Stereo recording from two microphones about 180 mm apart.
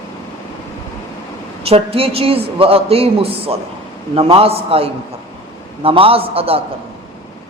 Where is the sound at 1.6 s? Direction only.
35° right (ahead or behind).